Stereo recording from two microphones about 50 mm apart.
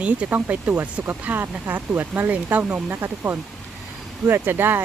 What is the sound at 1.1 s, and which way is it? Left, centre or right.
Speech, right.